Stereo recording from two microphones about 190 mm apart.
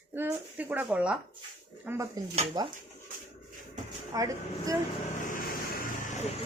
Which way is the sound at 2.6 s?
20° right (ahead or behind).